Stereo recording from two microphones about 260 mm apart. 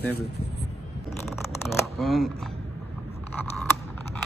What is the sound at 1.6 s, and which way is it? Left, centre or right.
Shuffling cards, centre.